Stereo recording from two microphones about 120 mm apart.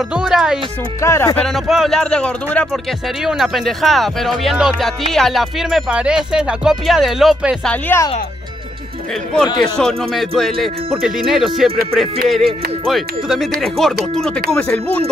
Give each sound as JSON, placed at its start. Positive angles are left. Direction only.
{"t": 0.1, "sound": "speech", "side_deg": -5}
{"t": 1.0, "sound": "speech", "side_deg": 25}
{"t": 1.4, "sound": "speech", "side_deg": 0}
{"t": 9.8, "sound": "speech", "side_deg": 5}